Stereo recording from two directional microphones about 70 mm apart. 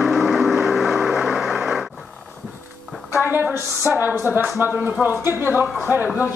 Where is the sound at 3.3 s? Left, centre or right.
Right.